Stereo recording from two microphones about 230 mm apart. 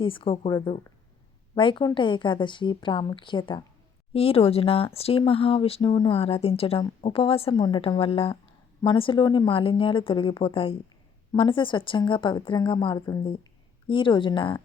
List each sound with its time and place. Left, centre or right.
0.0 s speech: left